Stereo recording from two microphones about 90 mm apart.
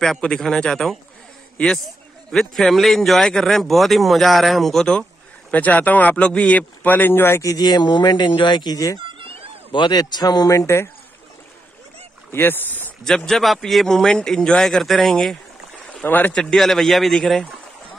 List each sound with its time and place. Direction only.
0.0 s speech: 5° left (ahead or behind)
5.5 s speech: 15° left (ahead or behind)
7.4 s a man's voice: 45° left (ahead or behind)
9.0 s cat: 85° right
9.7 s a man's voice: 60° left (ahead or behind); by 10.9 s 35° left (ahead or behind)
12.3 s speech: 25° left (ahead or behind)
13.0 s speech: 5° left (ahead or behind)
15.9 s speech: 15° left (ahead or behind)
16.3 s speech: 5° left (ahead or behind)